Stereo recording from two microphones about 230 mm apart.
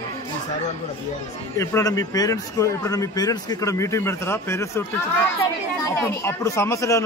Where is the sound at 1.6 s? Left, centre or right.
Centre.